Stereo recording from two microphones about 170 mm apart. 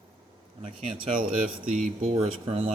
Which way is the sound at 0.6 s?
30° right (ahead or behind).